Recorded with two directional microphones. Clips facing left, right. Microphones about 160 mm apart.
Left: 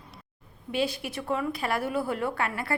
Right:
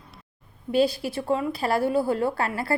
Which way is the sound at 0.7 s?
35° right (ahead or behind).